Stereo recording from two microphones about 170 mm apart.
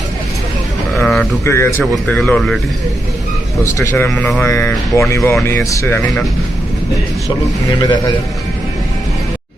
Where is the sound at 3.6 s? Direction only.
15° left (ahead or behind).